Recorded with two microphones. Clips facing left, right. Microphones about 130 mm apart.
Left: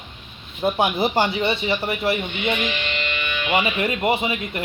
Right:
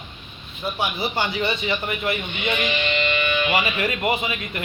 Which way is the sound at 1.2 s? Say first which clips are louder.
Left 3 dB; 25° left (ahead or behind).